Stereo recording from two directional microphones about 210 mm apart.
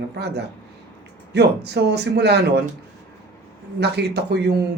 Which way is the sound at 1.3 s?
50° right (ahead or behind).